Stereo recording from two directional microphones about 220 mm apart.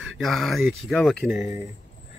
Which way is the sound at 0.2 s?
Centre (ahead or behind).